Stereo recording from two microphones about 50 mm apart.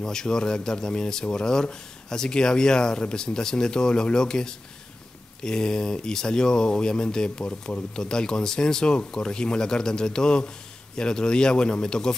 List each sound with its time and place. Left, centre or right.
0.0 s speech: centre